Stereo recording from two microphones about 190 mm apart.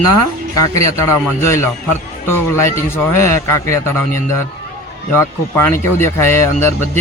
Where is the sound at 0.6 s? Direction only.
15° left (ahead or behind).